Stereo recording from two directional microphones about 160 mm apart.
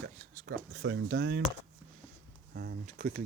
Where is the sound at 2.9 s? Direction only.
65° right (ahead or behind).